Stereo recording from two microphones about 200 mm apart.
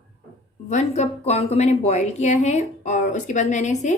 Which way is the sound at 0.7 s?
35° left (ahead or behind).